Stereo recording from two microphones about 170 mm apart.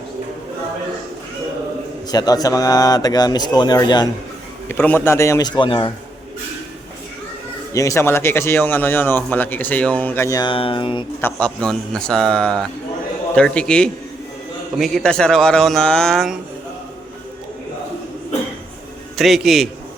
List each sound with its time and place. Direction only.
2.0 s speech: 25° left (ahead or behind)
4.7 s speech: 10° left (ahead or behind); by 5.9 s 30° left (ahead or behind)
7.7 s speech: 20° left (ahead or behind)
11.2 s a man's voice: 10° left (ahead or behind)
19.1 s a man's voice: centre (ahead or behind)